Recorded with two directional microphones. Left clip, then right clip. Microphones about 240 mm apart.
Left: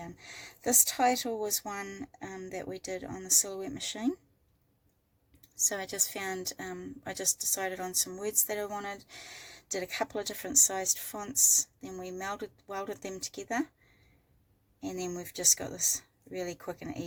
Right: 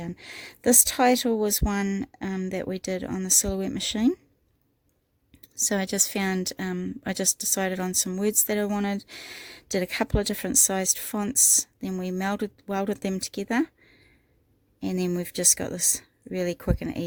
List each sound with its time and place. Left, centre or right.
0.0 s a woman's voice: right
5.4 s a woman's voice: right